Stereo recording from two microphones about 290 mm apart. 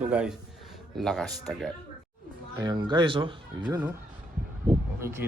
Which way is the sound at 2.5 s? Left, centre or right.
Centre.